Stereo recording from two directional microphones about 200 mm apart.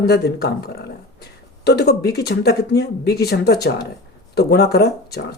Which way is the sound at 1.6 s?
55° left (ahead or behind).